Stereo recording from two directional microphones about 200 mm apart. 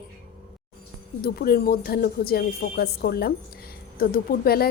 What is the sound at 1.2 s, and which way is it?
A woman's voice, 50° left (ahead or behind).